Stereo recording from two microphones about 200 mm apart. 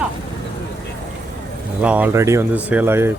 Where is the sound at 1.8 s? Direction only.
5° right (ahead or behind).